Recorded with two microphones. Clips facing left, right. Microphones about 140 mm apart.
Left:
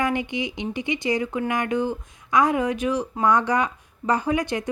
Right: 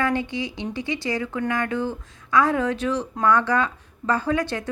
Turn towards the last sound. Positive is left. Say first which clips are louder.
# even
turn(degrees=15)  # may be behind; listen again after turning